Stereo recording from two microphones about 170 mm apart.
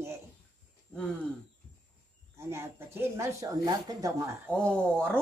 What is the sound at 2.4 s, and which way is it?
A woman's voice, 15° right (ahead or behind).